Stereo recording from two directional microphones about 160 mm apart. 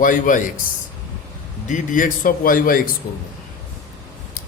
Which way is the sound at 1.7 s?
55° left (ahead or behind).